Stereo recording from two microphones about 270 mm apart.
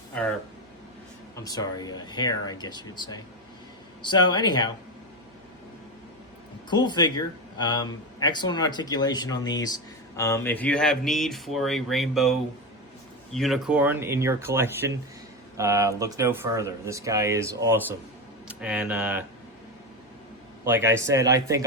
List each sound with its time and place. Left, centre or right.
1.4 s speech: centre
6.7 s speech: centre
20.7 s speech: centre